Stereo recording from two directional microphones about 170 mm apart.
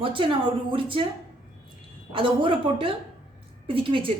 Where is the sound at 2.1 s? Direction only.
30° right (ahead or behind).